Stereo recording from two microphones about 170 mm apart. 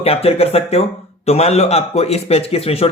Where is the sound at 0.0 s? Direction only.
35° left (ahead or behind).